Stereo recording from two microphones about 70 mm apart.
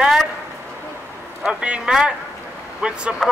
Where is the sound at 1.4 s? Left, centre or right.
Centre.